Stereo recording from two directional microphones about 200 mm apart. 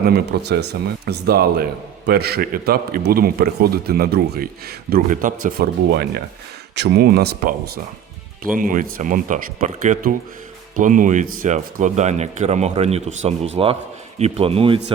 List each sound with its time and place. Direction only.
0.0 s a man's voice: 50° right (ahead or behind)
8.5 s speech: 40° right (ahead or behind)